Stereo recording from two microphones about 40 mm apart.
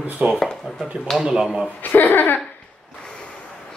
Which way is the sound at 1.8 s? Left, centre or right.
Left.